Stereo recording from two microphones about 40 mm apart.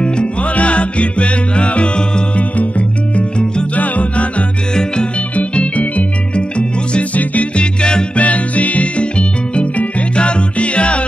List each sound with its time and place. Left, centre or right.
0.0 s music: left
3.7 s music: left